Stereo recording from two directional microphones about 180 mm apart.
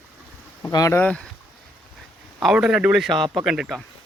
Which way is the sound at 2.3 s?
5° right (ahead or behind).